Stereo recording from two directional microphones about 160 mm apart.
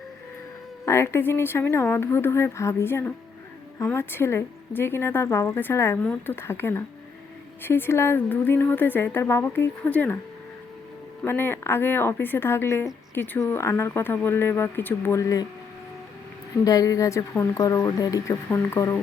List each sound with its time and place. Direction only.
0.9 s speech: 15° left (ahead or behind)
11.2 s speech: 15° left (ahead or behind)
16.6 s speech: 20° left (ahead or behind)